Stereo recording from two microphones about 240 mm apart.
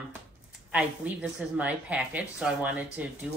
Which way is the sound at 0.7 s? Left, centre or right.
Centre.